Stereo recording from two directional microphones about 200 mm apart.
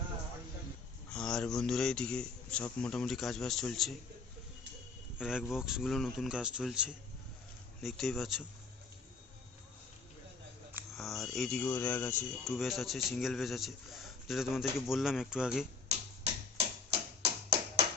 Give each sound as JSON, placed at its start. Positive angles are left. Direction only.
{"t": 1.1, "sound": "a man's voice", "side_deg": 5}
{"t": 5.1, "sound": "a man's voice", "side_deg": -5}
{"t": 10.9, "sound": "insect", "side_deg": 0}
{"t": 12.5, "sound": "a man's voice", "side_deg": 0}
{"t": 15.9, "sound": "tick-tock", "side_deg": -30}